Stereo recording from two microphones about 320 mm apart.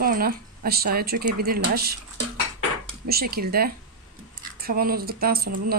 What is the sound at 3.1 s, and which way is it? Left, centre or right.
A woman's voice, right.